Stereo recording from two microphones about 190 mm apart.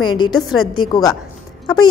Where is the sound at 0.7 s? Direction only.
20° left (ahead or behind).